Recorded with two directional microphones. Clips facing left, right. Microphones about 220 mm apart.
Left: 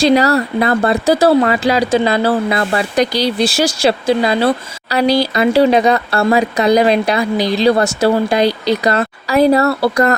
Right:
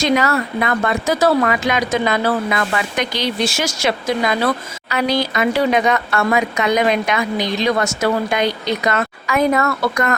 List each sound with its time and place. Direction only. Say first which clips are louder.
0.0 s speech: left 5 dB; 35° left (ahead or behind)